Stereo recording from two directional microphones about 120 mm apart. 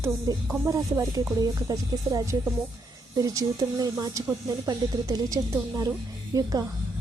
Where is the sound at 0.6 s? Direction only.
25° right (ahead or behind).